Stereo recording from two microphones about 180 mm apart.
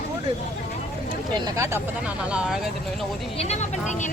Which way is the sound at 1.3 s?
15° right (ahead or behind).